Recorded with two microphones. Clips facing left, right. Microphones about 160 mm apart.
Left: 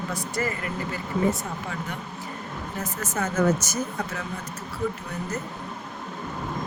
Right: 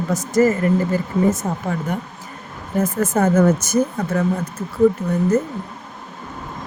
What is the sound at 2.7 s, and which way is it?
Speech, 50° right (ahead or behind).